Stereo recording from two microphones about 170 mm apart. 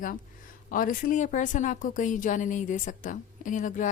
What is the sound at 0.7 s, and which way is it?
A woman's voice, 55° left (ahead or behind).